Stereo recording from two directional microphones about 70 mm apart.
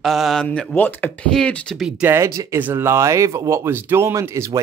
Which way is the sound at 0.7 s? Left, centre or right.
Left.